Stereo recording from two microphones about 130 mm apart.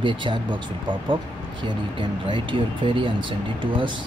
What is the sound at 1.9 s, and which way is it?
Speech, 40° right (ahead or behind).